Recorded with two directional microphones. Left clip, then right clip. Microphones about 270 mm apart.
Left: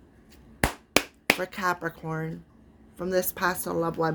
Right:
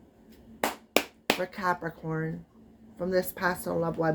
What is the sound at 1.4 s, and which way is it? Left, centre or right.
A woman's voice, left.